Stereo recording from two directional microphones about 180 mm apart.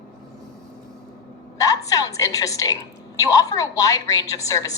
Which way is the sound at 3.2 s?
20° left (ahead or behind).